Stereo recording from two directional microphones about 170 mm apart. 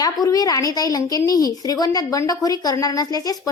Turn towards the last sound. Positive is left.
turn(degrees=20)  # may be behind; listen again after turning